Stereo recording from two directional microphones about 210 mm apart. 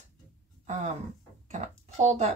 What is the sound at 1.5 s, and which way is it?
Speech, 35° right (ahead or behind).